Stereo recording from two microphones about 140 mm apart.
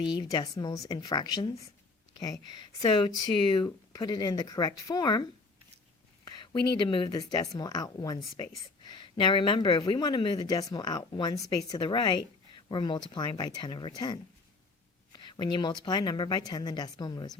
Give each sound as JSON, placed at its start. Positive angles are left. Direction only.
{"t": 0.0, "sound": "speech", "side_deg": 30}
{"t": 6.2, "sound": "speech", "side_deg": 30}